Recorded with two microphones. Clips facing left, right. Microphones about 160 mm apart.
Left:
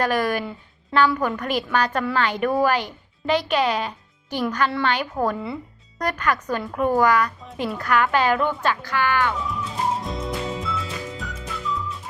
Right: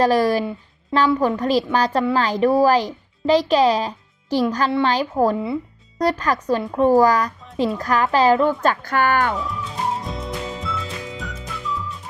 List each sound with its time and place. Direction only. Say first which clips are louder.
0.0 s a woman's voice: right 5 dB; 35° right (ahead or behind)
8.6 s speech: right 4 dB; 45° right (ahead or behind)
9.4 s music: even; centre (ahead or behind)